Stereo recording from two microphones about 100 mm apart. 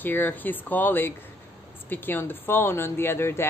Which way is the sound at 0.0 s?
20° left (ahead or behind).